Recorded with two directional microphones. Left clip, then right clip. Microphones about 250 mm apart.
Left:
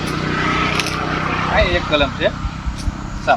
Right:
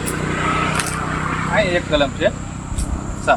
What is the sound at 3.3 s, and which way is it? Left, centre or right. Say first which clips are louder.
Speech: left 1 dB; centre.